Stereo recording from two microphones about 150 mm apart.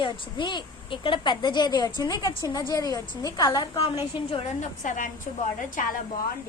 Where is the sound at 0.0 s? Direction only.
30° left (ahead or behind).